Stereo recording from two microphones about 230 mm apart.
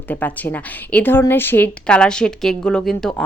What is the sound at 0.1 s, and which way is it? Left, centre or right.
A woman's voice, centre.